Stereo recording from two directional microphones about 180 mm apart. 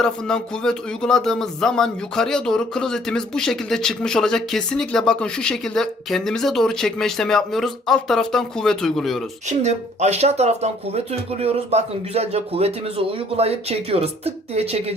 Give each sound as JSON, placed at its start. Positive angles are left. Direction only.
{"t": 0.0, "sound": "speech", "side_deg": 5}
{"t": 9.5, "sound": "speech", "side_deg": -40}